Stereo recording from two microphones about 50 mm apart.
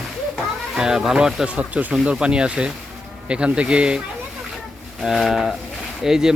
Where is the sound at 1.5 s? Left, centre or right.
Right.